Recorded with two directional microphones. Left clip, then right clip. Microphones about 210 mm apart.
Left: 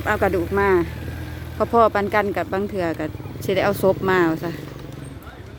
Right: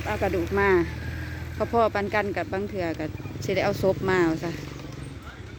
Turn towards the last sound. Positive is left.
turn(degrees=5)  # may be behind; listen again after turning